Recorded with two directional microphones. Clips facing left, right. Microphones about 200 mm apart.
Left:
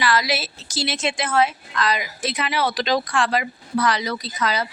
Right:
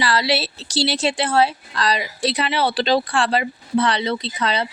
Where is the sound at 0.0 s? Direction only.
30° right (ahead or behind).